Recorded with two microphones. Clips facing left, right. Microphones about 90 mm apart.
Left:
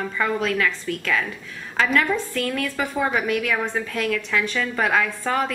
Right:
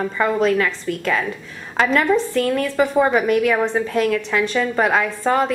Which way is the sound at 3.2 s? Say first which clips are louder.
Right 7 dB; 40° right (ahead or behind).